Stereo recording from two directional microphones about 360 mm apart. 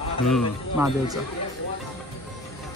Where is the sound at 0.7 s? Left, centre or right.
Centre.